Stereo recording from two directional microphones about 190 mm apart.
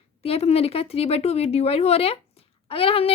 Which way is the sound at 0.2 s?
30° left (ahead or behind).